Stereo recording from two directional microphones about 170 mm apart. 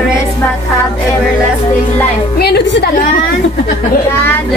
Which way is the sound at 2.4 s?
85° left.